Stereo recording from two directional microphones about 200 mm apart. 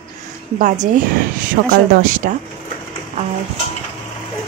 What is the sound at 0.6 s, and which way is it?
A woman's voice, 40° right (ahead or behind).